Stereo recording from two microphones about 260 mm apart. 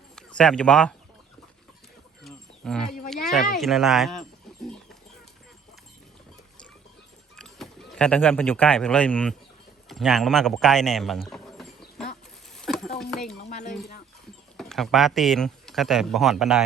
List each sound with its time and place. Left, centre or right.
0.2 s speech: centre
2.2 s a sound: centre
3.6 s speech: centre
7.3 s speech: centre
12.0 s bird: centre
12.5 s a sound: centre
13.4 s speech: left
14.5 s speech: centre